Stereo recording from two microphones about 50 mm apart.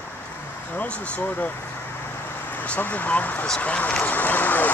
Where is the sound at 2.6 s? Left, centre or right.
Left.